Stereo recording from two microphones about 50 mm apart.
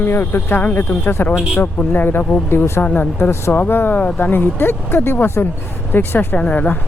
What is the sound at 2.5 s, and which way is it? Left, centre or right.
Speech, left.